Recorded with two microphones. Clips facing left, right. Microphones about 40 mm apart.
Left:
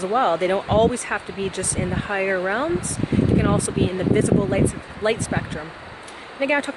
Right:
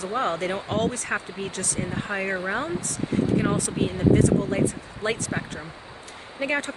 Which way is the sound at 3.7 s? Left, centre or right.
Left.